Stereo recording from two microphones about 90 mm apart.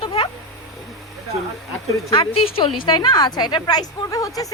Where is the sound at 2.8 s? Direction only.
60° left (ahead or behind); by 4.5 s 40° left (ahead or behind).